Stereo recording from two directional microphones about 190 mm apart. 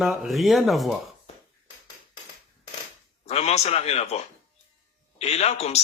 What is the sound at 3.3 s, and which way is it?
A man's voice, 35° left (ahead or behind).